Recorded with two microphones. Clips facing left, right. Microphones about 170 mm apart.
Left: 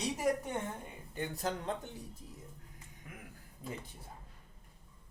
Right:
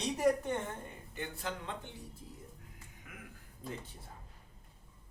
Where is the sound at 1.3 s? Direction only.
40° left (ahead or behind).